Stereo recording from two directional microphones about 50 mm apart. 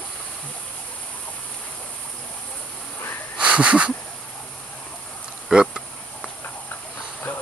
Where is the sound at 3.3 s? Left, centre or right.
Right.